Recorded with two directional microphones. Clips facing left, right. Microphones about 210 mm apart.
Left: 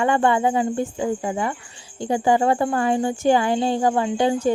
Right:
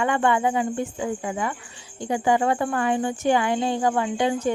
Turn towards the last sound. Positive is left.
turn(degrees=35)  # may be behind; listen again after turning